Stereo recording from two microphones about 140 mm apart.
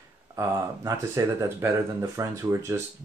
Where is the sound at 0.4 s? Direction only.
20° right (ahead or behind).